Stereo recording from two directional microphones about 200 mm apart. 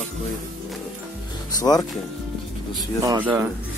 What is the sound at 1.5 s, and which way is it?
Speech, 20° left (ahead or behind).